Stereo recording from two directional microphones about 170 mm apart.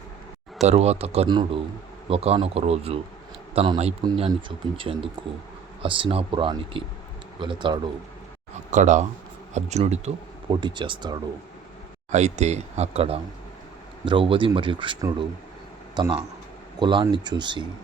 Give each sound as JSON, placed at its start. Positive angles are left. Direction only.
{"t": 0.6, "sound": "speech", "side_deg": -40}
{"t": 8.7, "sound": "speech", "side_deg": -45}
{"t": 10.5, "sound": "speech", "side_deg": -25}
{"t": 12.1, "sound": "speech", "side_deg": -40}
{"t": 16.0, "sound": "speech", "side_deg": -25}